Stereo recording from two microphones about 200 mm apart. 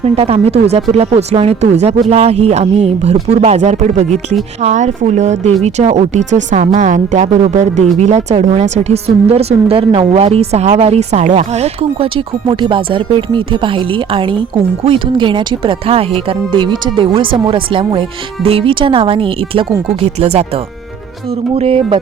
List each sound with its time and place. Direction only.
0.0 s speech: 30° right (ahead or behind)
21.5 s speech: 30° right (ahead or behind)